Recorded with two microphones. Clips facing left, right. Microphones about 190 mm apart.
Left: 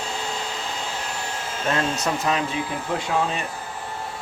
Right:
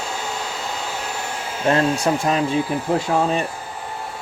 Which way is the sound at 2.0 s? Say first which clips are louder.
Right 4 dB; 35° right (ahead or behind).